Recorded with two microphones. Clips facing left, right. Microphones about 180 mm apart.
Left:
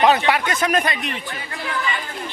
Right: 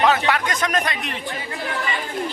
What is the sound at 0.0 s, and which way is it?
Speech, 15° left (ahead or behind).